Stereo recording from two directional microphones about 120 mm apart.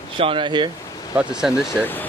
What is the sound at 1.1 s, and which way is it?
Speech, 10° right (ahead or behind).